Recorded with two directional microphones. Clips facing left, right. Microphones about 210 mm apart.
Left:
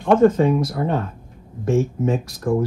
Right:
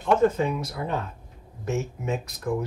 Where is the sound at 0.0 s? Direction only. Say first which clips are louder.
Left 7 dB; 50° left (ahead or behind).